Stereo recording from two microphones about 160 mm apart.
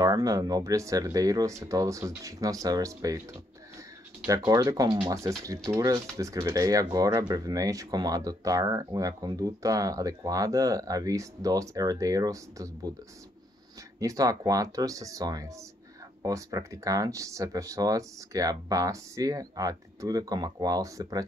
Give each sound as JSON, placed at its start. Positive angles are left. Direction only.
{"t": 0.0, "sound": "speech", "side_deg": -20}
{"t": 4.5, "sound": "speech", "side_deg": -25}
{"t": 13.9, "sound": "speech", "side_deg": -20}